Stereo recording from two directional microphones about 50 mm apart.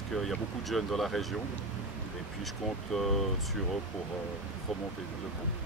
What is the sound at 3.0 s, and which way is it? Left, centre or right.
Speech, centre.